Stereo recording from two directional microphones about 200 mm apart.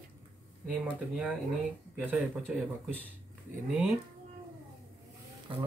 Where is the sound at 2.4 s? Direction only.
5° right (ahead or behind).